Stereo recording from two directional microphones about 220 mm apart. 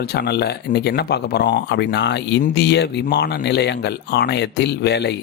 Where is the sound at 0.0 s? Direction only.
45° left (ahead or behind).